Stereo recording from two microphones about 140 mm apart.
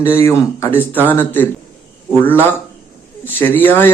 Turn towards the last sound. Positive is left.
turn(degrees=15)  # may be behind; listen again after turning